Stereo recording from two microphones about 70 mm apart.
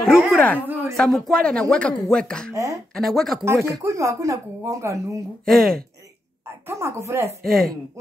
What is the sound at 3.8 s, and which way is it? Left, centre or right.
Speech, right.